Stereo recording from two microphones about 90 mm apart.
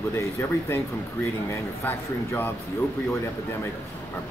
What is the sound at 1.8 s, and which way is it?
Speech, 20° left (ahead or behind).